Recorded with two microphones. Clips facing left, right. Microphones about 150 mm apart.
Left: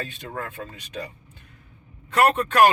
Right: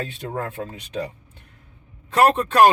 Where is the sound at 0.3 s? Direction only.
30° right (ahead or behind).